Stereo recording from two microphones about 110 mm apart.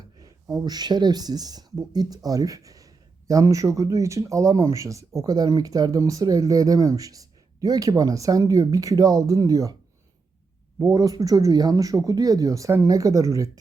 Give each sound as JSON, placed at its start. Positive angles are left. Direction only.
{"t": 0.2, "sound": "speech", "side_deg": -35}
{"t": 10.9, "sound": "speech", "side_deg": -35}